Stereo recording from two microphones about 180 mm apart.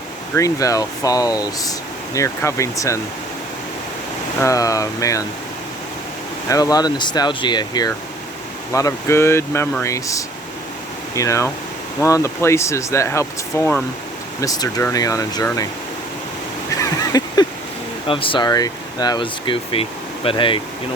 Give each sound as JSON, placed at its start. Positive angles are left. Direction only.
{"t": 0.3, "sound": "speech", "side_deg": 20}
{"t": 4.4, "sound": "speech", "side_deg": 20}
{"t": 6.5, "sound": "speech", "side_deg": 20}
{"t": 16.7, "sound": "a sound", "side_deg": 20}
{"t": 18.1, "sound": "speech", "side_deg": 30}